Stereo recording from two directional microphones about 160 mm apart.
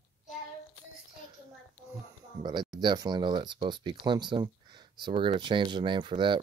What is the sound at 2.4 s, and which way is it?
Speech, 25° right (ahead or behind).